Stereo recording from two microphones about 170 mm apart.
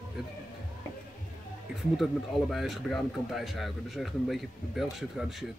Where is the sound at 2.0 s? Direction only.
Centre (ahead or behind).